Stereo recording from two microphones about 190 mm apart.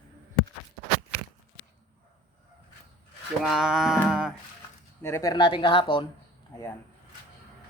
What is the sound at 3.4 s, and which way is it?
Speech, 5° right (ahead or behind).